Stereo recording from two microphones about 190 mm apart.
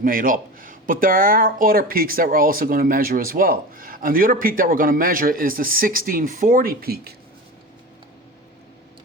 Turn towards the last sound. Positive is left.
turn(degrees=-55)  # may be behind; listen again after turning